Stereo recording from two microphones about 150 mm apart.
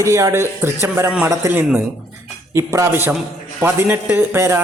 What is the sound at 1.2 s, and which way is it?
A man's voice, 20° right (ahead or behind).